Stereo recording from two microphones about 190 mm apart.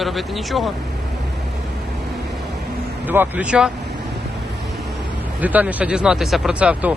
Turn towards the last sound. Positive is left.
turn(degrees=-5)  # may be behind; listen again after turning